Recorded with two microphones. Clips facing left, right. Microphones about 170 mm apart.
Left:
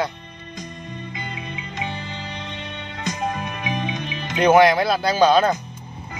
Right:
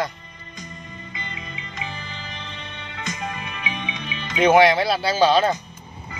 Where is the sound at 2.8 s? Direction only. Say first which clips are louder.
Left 4 dB; 40° left (ahead or behind).